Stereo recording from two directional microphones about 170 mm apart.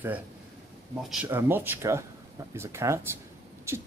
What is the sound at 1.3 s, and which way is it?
Speech, 15° right (ahead or behind).